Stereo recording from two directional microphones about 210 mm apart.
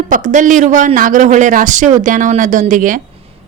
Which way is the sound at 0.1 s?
35° right (ahead or behind).